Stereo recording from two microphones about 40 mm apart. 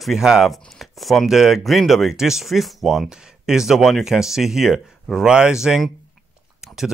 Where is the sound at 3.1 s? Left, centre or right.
Centre.